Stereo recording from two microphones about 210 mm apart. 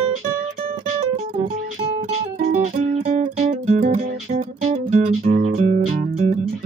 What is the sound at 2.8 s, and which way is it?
Music, 35° right (ahead or behind).